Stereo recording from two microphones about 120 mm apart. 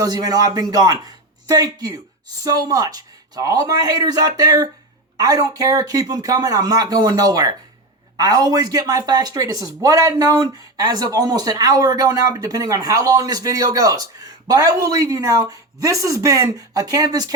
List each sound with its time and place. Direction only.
0.0 s speech: 35° right (ahead or behind)